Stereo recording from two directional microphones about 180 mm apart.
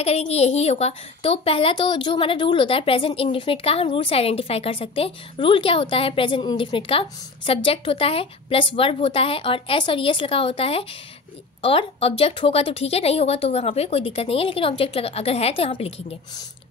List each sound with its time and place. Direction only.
0.0 s a woman's voice: 35° left (ahead or behind)